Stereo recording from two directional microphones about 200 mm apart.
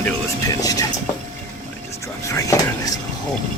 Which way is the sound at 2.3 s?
15° left (ahead or behind).